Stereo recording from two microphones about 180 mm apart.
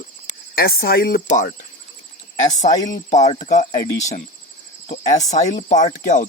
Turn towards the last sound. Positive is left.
turn(degrees=45)  # may be behind; listen again after turning